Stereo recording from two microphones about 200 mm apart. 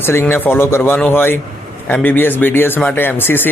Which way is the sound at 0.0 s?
10° left (ahead or behind).